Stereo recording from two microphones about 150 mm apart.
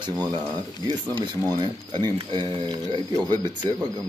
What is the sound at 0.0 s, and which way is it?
Speech, 30° right (ahead or behind).